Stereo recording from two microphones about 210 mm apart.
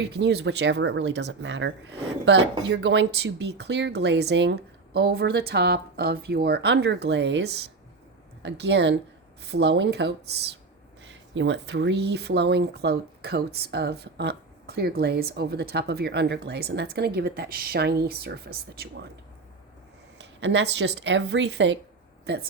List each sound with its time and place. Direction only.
0.2 s speech: 55° right (ahead or behind)
20.4 s speech: 55° right (ahead or behind)